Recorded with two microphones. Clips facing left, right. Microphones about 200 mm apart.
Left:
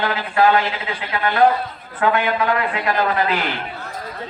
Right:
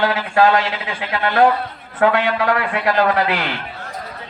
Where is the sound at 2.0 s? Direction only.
80° right.